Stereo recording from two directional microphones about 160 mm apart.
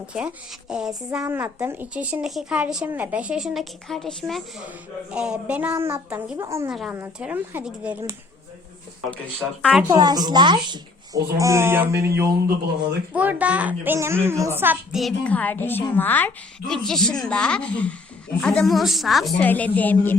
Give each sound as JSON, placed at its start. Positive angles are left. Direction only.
{"t": 0.7, "sound": "a woman's voice", "side_deg": -5}
{"t": 1.2, "sound": "a woman's voice", "side_deg": -15}
{"t": 6.7, "sound": "a woman's voice", "side_deg": 0}
{"t": 9.6, "sound": "a woman's voice", "side_deg": 5}
{"t": 9.8, "sound": "a child's voice", "side_deg": -25}
{"t": 14.9, "sound": "a woman's voice", "side_deg": 5}